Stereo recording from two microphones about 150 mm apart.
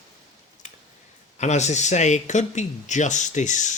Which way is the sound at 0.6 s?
55° left (ahead or behind).